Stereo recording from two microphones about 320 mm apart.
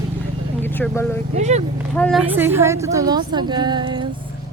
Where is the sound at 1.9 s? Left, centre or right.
Centre.